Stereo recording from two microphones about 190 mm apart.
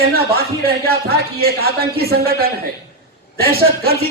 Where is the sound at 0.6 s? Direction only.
55° right (ahead or behind).